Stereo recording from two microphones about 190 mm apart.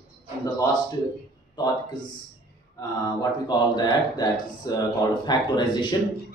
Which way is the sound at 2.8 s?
20° left (ahead or behind).